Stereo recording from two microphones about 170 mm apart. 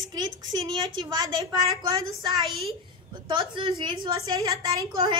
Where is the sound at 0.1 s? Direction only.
25° right (ahead or behind).